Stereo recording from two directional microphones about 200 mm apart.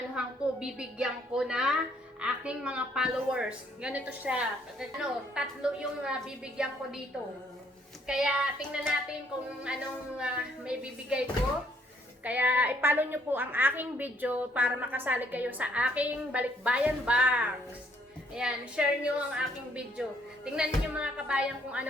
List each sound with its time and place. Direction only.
0.2 s a woman's voice: 5° right (ahead or behind)
8.0 s a woman's voice: 5° right (ahead or behind)
12.2 s a woman's voice: 10° right (ahead or behind)